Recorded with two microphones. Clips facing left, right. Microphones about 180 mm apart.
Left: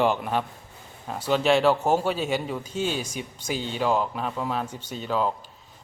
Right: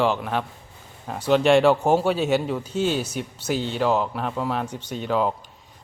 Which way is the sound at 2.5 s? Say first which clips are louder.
Right 4 dB; 10° left (ahead or behind).